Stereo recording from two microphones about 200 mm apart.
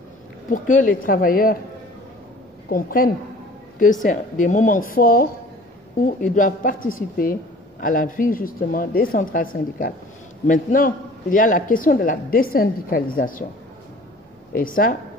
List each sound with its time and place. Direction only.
0.5 s a man's voice: 40° left (ahead or behind)
2.7 s a man's voice: 45° left (ahead or behind)
14.5 s a man's voice: 45° left (ahead or behind)